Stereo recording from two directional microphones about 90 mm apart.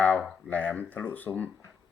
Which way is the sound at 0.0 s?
20° left (ahead or behind).